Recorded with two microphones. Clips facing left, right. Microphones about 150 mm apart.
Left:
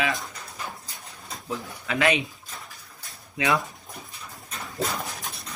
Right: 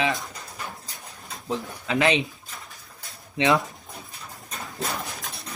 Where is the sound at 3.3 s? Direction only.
25° right (ahead or behind).